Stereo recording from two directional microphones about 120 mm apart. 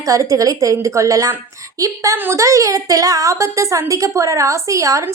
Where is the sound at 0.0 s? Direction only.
30° right (ahead or behind).